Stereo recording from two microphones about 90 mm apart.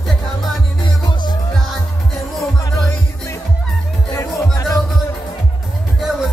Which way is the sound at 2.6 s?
40° left (ahead or behind).